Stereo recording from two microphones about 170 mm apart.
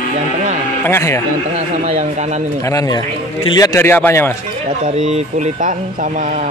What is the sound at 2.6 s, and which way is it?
A man's voice, 20° left (ahead or behind).